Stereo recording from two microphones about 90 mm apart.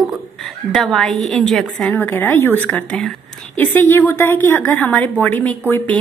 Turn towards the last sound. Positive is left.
turn(degrees=20)  # may be behind; listen again after turning